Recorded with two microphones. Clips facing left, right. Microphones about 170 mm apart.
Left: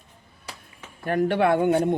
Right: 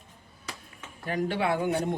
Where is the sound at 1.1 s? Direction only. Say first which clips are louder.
Left 7 dB; 60° left (ahead or behind).